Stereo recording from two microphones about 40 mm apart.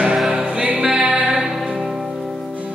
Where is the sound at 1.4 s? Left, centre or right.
Centre.